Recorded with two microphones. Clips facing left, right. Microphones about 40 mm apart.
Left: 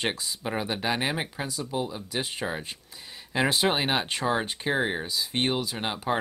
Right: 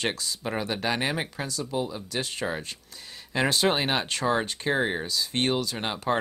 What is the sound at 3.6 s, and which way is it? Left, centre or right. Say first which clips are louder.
Speech: right 1 dB; centre.